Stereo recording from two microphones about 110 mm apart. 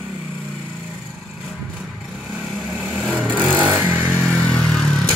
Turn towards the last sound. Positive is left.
turn(degrees=5)  # may be behind; listen again after turning